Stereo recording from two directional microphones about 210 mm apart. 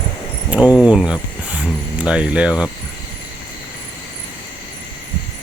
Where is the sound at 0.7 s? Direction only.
5° right (ahead or behind).